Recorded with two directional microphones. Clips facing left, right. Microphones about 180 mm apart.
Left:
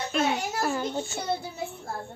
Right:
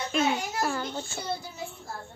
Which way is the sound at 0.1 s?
Centre (ahead or behind).